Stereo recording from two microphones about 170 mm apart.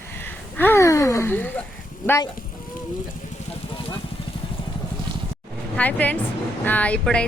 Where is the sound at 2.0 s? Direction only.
15° left (ahead or behind).